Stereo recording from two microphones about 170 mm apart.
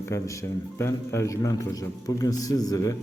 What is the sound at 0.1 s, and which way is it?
A man's voice, 20° left (ahead or behind).